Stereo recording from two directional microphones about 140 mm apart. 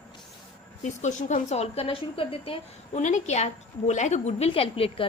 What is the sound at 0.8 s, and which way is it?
A woman's voice, 60° left (ahead or behind).